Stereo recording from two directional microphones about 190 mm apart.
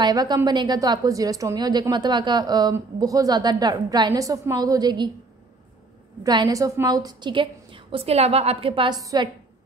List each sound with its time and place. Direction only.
0.0 s a woman's voice: 20° right (ahead or behind)
6.2 s a woman's voice: 20° right (ahead or behind)